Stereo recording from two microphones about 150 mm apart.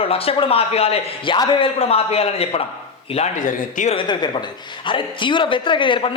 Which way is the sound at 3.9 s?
30° left (ahead or behind).